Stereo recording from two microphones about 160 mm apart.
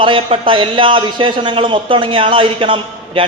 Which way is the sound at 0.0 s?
35° right (ahead or behind).